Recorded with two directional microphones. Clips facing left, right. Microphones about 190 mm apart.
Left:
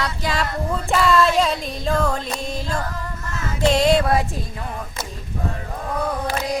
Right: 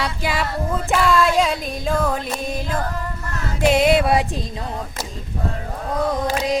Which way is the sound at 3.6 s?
10° right (ahead or behind).